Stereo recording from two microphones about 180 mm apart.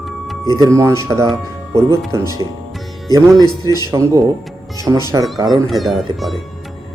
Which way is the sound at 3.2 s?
15° right (ahead or behind).